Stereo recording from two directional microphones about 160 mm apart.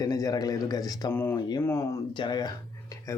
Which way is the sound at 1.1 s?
15° left (ahead or behind).